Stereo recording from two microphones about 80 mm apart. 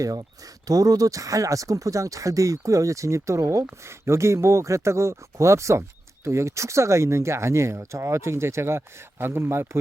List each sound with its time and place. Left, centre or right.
0.0 s speech: right